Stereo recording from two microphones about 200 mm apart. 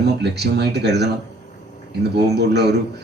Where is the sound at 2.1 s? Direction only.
55° right (ahead or behind).